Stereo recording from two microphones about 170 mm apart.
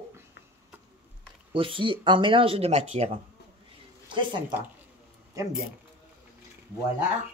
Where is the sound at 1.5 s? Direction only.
30° right (ahead or behind).